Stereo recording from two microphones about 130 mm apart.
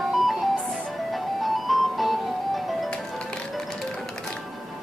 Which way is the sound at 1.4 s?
Centre (ahead or behind).